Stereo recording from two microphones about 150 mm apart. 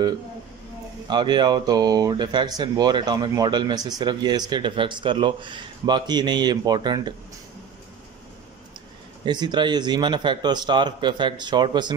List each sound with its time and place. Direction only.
1.0 s speech: 30° right (ahead or behind)
9.2 s speech: 30° right (ahead or behind)